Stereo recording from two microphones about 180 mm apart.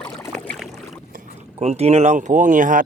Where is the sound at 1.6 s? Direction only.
35° right (ahead or behind).